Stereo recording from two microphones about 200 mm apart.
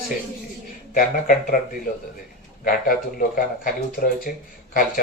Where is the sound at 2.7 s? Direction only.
45° left (ahead or behind).